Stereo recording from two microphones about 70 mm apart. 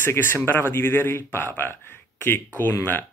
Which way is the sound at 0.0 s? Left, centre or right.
Left.